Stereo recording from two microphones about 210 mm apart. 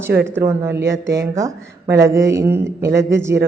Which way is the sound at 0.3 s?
10° right (ahead or behind).